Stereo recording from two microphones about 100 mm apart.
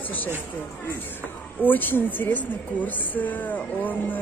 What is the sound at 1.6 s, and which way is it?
A woman's voice, 20° left (ahead or behind).